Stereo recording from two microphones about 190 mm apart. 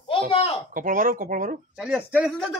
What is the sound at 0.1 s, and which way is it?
Speech, 30° left (ahead or behind).